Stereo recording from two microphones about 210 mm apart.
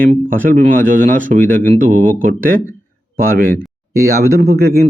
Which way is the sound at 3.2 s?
45° right (ahead or behind).